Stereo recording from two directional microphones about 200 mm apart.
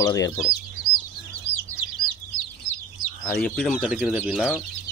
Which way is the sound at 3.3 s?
5° left (ahead or behind).